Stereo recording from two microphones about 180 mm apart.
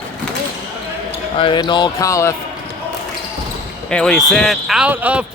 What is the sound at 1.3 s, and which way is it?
Speech, 25° left (ahead or behind).